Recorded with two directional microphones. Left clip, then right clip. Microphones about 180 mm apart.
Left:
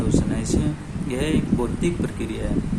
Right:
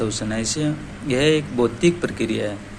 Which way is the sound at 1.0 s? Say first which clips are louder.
Right 6 dB; 20° right (ahead or behind).